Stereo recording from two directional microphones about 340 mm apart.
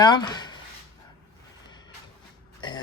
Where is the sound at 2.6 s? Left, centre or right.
Centre.